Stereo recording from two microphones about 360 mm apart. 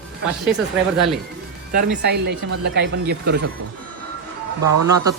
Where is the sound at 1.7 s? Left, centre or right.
Right.